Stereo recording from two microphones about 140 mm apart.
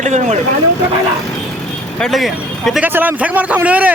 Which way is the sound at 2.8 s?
15° right (ahead or behind).